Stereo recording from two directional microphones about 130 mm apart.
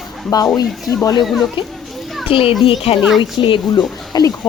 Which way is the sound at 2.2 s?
45° left (ahead or behind).